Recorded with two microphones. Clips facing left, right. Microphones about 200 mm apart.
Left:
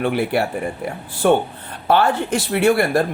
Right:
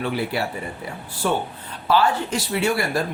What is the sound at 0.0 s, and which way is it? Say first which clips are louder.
Speech: left 5 dB; 55° left (ahead or behind).